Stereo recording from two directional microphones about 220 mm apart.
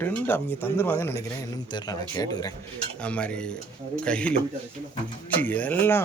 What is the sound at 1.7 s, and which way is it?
Speech, 20° left (ahead or behind).